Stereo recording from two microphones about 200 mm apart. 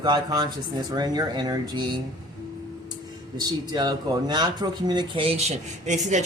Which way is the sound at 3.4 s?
20° right (ahead or behind).